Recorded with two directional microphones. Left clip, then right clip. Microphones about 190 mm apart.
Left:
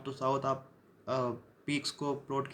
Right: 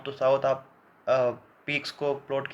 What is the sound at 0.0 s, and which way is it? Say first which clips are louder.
Speech: right 9 dB; 15° left (ahead or behind).